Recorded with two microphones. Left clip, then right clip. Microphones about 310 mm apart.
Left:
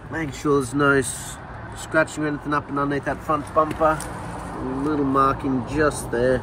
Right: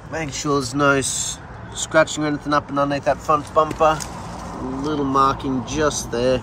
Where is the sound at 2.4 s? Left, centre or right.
Centre.